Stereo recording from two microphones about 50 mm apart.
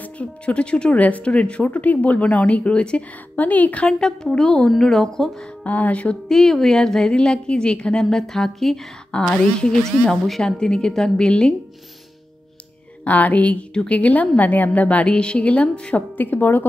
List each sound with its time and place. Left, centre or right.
0.0 s a woman's voice: left
3.3 s a woman's voice: left
3.8 s speech: centre
5.6 s a woman's voice: left
6.2 s speech: centre
13.0 s a woman's voice: left
16.2 s a woman's voice: left